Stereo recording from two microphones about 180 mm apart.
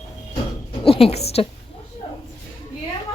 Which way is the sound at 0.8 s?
30° left (ahead or behind).